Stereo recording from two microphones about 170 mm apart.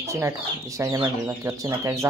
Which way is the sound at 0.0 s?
15° right (ahead or behind).